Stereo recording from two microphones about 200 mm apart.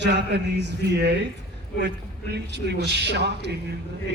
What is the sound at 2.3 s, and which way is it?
Speech, 55° right (ahead or behind).